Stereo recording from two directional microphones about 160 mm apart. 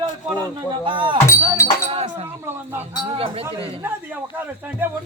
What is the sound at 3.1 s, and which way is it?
Speech, 35° right (ahead or behind).